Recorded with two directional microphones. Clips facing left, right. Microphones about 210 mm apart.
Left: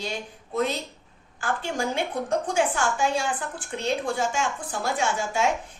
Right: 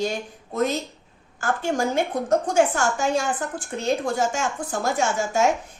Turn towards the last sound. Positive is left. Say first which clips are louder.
# right 4 dB
turn(degrees=-45)  # may be behind; listen again after turning